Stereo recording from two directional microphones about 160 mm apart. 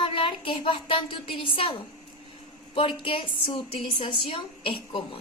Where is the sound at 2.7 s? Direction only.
35° left (ahead or behind).